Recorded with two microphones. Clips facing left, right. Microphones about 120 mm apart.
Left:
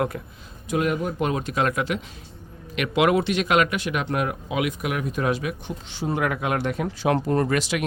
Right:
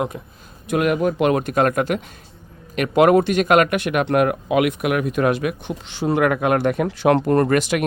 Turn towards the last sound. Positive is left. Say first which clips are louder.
# right 5 dB
turn(degrees=-55)  # may be behind; listen again after turning